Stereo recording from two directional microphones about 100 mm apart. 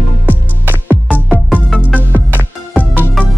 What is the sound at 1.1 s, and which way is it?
Music, 5° right (ahead or behind).